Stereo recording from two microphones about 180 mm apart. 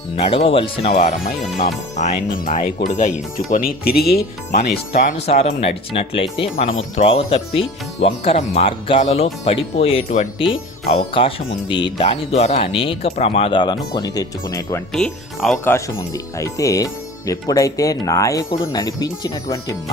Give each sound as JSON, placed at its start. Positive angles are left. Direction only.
{"t": 0.3, "sound": "speech", "side_deg": 30}
{"t": 1.6, "sound": "speech", "side_deg": 45}
{"t": 4.9, "sound": "speech", "side_deg": 40}
{"t": 14.9, "sound": "speech", "side_deg": 0}
{"t": 16.0, "sound": "speech", "side_deg": 20}